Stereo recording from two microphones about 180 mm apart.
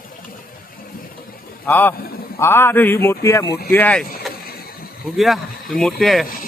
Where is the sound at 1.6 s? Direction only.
10° left (ahead or behind).